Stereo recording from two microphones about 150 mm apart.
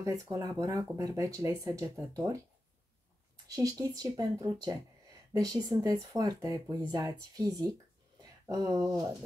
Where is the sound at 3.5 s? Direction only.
25° right (ahead or behind).